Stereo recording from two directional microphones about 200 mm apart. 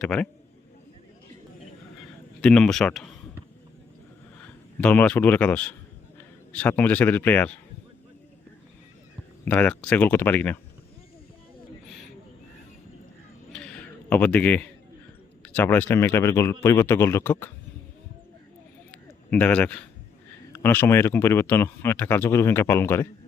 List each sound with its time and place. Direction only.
0.0 s speech: 5° left (ahead or behind)
2.4 s speech: 5° left (ahead or behind)
4.8 s speech: 5° left (ahead or behind)
9.4 s speech: 5° left (ahead or behind)
13.5 s a sound: 5° left (ahead or behind)
15.5 s speech: 10° left (ahead or behind)
19.3 s speech: 5° left (ahead or behind)